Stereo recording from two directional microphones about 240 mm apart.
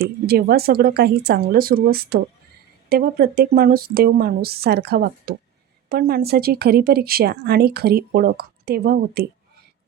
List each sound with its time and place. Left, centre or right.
0.0 s speech: right